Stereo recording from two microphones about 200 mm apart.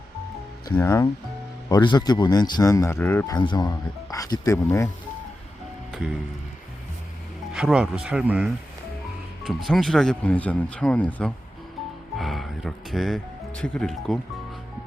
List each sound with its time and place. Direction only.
0.8 s speech: 15° left (ahead or behind)
3.3 s speech: 20° left (ahead or behind)
7.5 s speech: 5° right (ahead or behind)
9.6 s speech: centre (ahead or behind)